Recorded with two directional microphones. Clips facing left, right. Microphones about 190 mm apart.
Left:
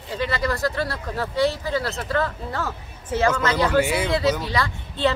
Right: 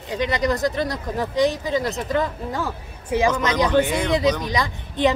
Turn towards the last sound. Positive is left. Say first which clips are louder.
# right 3 dB
turn(degrees=-15)  # may be behind; listen again after turning